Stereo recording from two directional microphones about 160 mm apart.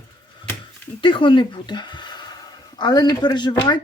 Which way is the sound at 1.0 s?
30° left (ahead or behind).